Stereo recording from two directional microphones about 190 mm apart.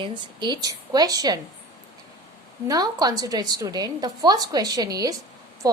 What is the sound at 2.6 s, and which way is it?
A woman's voice, 20° right (ahead or behind).